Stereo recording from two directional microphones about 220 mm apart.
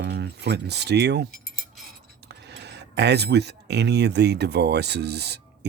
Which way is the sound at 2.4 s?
50° right (ahead or behind).